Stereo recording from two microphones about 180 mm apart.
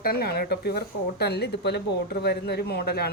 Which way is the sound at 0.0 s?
55° left (ahead or behind).